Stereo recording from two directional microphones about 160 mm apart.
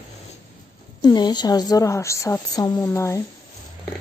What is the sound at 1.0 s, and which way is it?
Speech, 25° left (ahead or behind).